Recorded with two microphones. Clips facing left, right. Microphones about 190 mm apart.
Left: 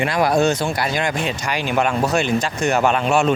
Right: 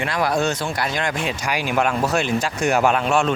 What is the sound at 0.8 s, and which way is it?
Speech, 5° left (ahead or behind).